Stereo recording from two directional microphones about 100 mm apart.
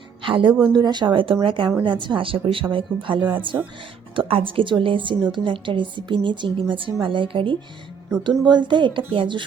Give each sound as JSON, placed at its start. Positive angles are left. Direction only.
{"t": 0.2, "sound": "a woman's voice", "side_deg": -55}
{"t": 0.7, "sound": "a woman's voice", "side_deg": -45}